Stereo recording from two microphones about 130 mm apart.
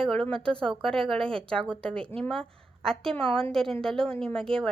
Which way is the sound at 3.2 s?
45° right (ahead or behind).